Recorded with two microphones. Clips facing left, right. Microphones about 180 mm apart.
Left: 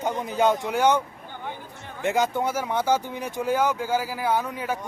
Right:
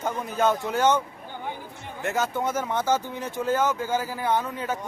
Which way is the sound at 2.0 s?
15° left (ahead or behind).